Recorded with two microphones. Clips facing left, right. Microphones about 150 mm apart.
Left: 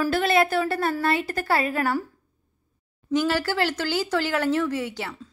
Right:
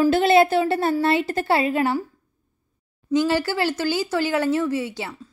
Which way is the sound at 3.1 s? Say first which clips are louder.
Right 3 dB; 15° right (ahead or behind).